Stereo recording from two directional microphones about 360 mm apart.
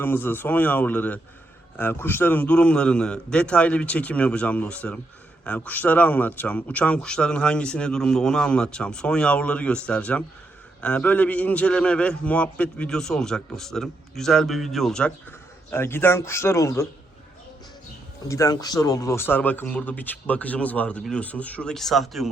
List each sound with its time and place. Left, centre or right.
0.0 s speech: centre
18.3 s speech: centre